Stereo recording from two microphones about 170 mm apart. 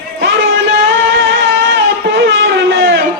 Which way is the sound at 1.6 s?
90° right.